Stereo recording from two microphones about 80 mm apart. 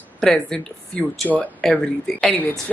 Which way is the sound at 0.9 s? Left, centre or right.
Left.